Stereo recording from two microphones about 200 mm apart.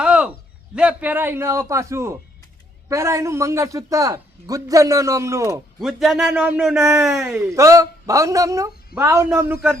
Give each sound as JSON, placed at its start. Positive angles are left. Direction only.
{"t": 0.0, "sound": "a sound", "side_deg": -5}
{"t": 0.8, "sound": "a man's voice", "side_deg": -5}
{"t": 5.8, "sound": "a man's voice", "side_deg": 0}